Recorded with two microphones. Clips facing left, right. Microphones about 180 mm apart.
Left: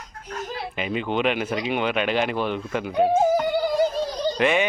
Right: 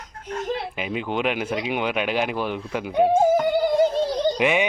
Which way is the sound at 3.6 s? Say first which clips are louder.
Right 3 dB; 25° right (ahead or behind).